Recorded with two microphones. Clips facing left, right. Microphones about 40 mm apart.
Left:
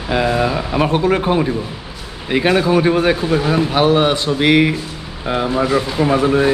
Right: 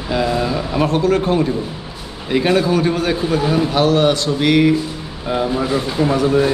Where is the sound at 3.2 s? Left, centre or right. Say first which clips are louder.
Left 1 dB; centre.